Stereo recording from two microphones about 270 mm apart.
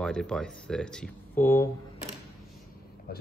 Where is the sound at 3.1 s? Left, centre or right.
Left.